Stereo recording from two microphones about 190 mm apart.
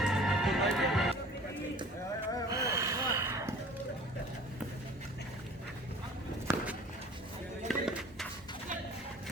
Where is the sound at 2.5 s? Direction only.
15° right (ahead or behind).